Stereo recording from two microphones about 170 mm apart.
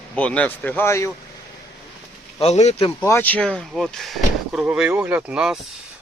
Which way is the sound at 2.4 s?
40° left (ahead or behind).